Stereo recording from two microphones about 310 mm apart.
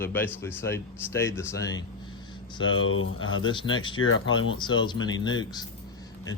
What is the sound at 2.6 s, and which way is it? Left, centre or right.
Speech, left.